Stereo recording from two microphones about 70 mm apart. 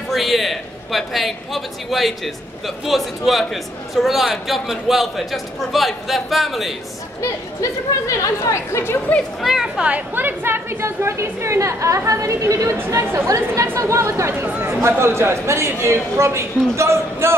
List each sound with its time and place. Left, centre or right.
0.1 s speech: centre
8.2 s speech: left
9.4 s speech: centre
9.8 s a woman's voice: right
14.4 s a woman's voice: right